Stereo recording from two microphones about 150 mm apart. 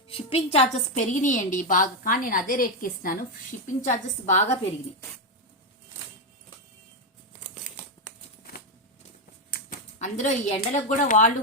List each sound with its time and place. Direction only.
0.1 s a woman's voice: 40° left (ahead or behind); by 3.2 s 70° left (ahead or behind)
3.7 s a woman's voice: 55° left (ahead or behind)
10.0 s a woman's voice: 50° left (ahead or behind)